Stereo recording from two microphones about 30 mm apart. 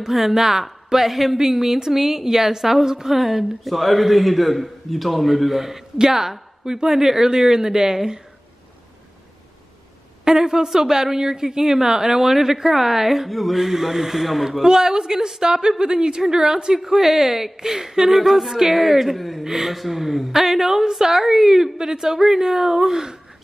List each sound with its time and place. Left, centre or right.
0.1 s a woman's voice: centre
10.2 s a woman's voice: centre